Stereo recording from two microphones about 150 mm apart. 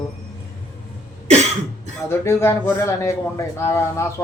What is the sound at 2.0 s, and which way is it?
A man's voice, 15° left (ahead or behind).